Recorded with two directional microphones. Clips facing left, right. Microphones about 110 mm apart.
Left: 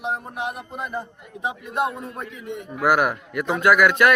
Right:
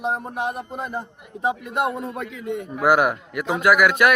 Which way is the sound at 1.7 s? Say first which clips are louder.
Right 1 dB; 70° right (ahead or behind).